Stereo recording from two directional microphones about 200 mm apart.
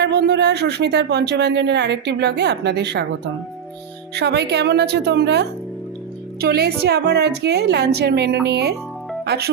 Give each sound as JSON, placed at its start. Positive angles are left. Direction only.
{"t": 0.0, "sound": "speech", "side_deg": -55}
{"t": 4.1, "sound": "a woman's voice", "side_deg": -55}